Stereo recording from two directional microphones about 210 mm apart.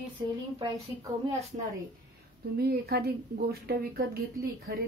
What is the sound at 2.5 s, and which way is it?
Speech, 50° right (ahead or behind).